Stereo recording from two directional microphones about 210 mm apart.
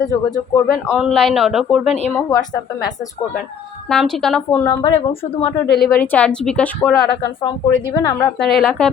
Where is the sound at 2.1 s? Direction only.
20° left (ahead or behind).